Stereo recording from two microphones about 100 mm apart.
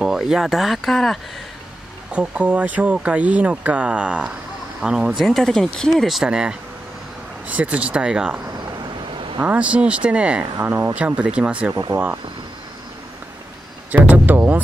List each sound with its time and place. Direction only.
0.0 s speech: 5° right (ahead or behind)
2.1 s speech: 15° right (ahead or behind)
5.2 s speech: 5° left (ahead or behind)
9.4 s speech: 15° right (ahead or behind)
10.4 s speech: 25° right (ahead or behind)
11.9 s speech: 40° right (ahead or behind)
13.9 s a sound: 15° right (ahead or behind)